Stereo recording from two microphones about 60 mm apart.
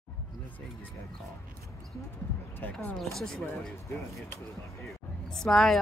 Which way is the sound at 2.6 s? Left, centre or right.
Left.